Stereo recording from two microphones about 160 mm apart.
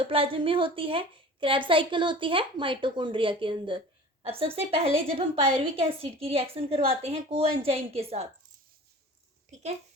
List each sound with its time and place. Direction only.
0.0 s a woman's voice: 35° right (ahead or behind)